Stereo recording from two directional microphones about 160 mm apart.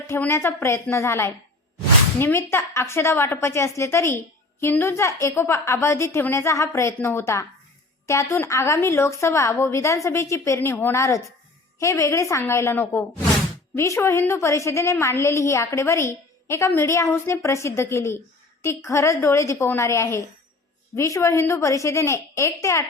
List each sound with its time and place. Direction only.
0.1 s a woman's voice: 15° left (ahead or behind)